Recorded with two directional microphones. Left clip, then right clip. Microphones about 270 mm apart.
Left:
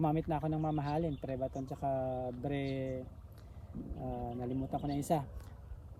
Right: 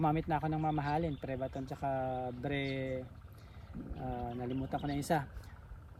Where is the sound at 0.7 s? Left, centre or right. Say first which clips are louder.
Right 3 dB; right.